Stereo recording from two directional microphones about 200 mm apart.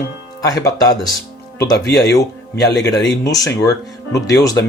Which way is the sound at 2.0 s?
15° left (ahead or behind).